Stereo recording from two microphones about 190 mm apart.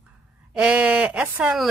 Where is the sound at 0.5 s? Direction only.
5° right (ahead or behind).